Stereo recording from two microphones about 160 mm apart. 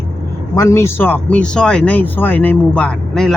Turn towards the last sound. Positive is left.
turn(degrees=5)  # may be behind; listen again after turning